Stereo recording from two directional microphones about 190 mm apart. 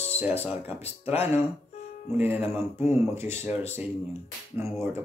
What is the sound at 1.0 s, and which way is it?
Speech, 10° right (ahead or behind).